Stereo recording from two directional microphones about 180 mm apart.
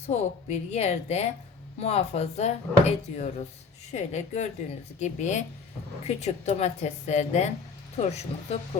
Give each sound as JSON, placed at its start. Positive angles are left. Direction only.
{"t": 0.1, "sound": "a woman's voice", "side_deg": 35}